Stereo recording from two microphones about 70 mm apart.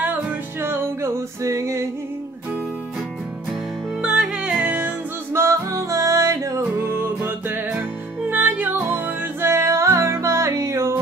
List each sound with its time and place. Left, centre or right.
0.0 s music: right
4.0 s music: centre
5.3 s music: right
6.7 s music: right
9.4 s music: right